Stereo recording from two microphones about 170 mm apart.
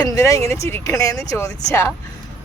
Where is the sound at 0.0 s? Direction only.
20° left (ahead or behind).